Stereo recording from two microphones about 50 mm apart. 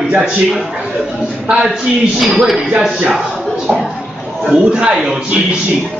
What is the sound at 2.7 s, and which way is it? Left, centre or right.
Speech, centre.